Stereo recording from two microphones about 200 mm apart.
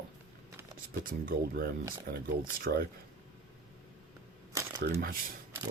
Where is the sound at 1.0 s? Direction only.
45° right (ahead or behind).